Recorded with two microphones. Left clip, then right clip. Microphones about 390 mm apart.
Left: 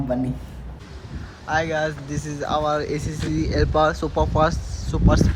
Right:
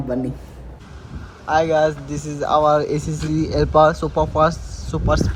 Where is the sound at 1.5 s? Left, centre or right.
Centre.